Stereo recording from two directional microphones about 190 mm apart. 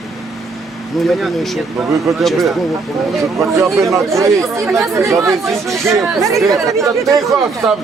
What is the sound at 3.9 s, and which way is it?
Speech, 15° right (ahead or behind).